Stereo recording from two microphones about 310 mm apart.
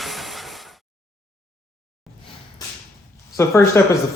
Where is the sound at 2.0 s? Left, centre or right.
Centre.